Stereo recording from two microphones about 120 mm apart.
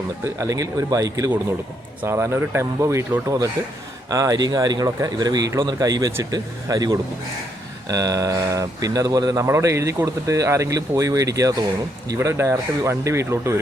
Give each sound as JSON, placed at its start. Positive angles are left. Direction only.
{"t": 0.3, "sound": "speech", "side_deg": -25}